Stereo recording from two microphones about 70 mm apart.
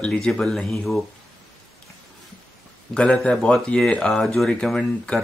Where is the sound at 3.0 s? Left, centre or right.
Centre.